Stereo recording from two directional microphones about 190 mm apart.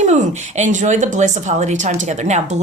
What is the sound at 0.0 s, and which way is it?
A woman's voice, 40° right (ahead or behind).